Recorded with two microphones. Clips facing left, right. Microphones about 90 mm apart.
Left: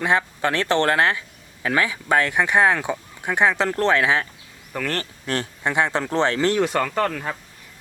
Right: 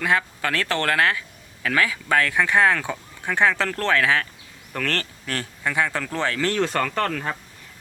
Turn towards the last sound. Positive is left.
turn(degrees=10)  # may be behind; listen again after turning